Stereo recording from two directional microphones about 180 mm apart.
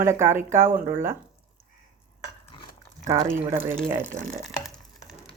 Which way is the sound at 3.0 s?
20° right (ahead or behind).